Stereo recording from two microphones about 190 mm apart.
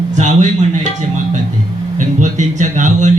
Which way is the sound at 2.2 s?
40° right (ahead or behind).